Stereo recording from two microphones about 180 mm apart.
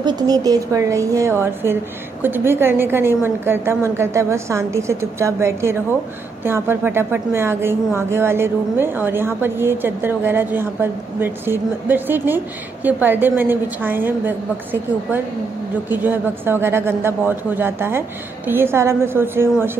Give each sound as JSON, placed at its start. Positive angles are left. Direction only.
{"t": 0.0, "sound": "speech", "side_deg": -20}